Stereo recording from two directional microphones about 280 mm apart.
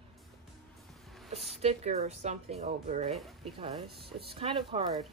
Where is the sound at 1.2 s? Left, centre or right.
Centre.